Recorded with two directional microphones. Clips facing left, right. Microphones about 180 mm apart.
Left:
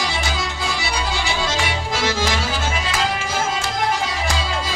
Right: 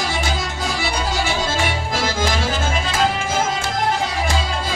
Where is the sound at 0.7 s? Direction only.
50° right (ahead or behind).